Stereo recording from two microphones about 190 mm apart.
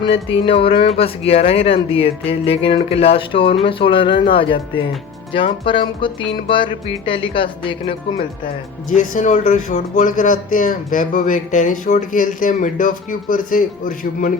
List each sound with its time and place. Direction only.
0.0 s speech: 30° left (ahead or behind)
8.9 s speech: 40° left (ahead or behind)